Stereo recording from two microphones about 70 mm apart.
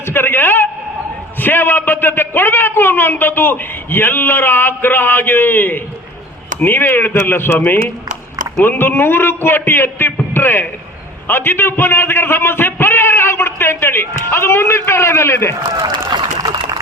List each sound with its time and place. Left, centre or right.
0.0 s a man's voice: left
8.6 s a man's voice: left
16.0 s a sound: right